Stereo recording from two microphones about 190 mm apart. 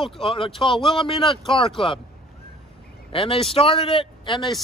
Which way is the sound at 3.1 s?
30° left (ahead or behind).